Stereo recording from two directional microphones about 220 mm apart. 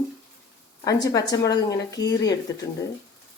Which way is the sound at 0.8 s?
15° left (ahead or behind).